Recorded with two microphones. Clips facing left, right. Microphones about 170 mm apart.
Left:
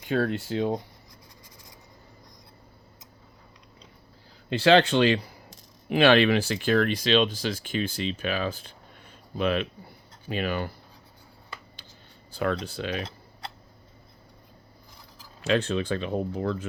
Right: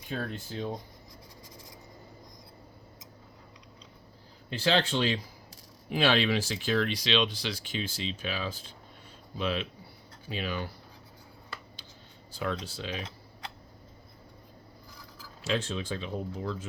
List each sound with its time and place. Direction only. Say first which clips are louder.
0.0 s speech: left 10 dB; 85° left
4.4 s speech: left 8 dB; 75° left (ahead or behind); by 10.7 s 55° left (ahead or behind)
12.3 s speech: left 6 dB; 60° left (ahead or behind)
15.4 s speech: left 7 dB; 65° left (ahead or behind)